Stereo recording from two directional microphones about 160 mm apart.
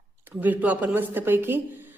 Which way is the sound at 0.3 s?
10° right (ahead or behind).